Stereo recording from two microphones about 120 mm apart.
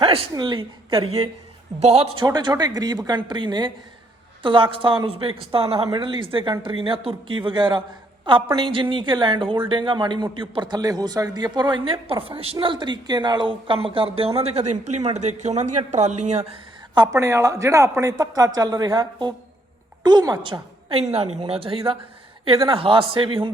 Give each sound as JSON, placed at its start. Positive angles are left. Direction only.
{"t": 0.0, "sound": "a sound", "side_deg": -50}
{"t": 0.3, "sound": "speech", "side_deg": -35}
{"t": 1.8, "sound": "a woman's voice", "side_deg": -65}
{"t": 2.1, "sound": "a man's voice", "side_deg": -35}
{"t": 5.9, "sound": "a man's voice", "side_deg": -45}
{"t": 16.9, "sound": "a man's voice", "side_deg": -30}
{"t": 21.1, "sound": "a man's voice", "side_deg": -60}